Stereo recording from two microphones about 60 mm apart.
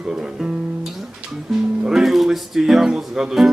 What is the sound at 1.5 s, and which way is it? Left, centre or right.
Speech, centre.